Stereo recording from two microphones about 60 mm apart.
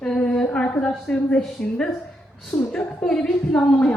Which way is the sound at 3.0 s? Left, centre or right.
Centre.